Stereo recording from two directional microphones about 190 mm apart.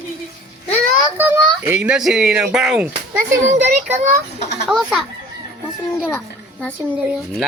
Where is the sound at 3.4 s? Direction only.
35° right (ahead or behind).